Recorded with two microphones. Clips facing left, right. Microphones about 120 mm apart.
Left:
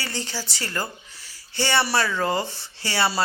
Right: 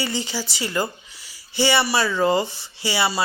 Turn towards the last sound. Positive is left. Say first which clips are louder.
# right 1 dB
turn(degrees=-10)  # may be behind; listen again after turning